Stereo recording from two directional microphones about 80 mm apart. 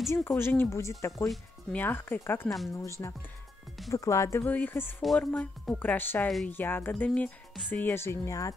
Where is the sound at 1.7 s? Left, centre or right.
Left.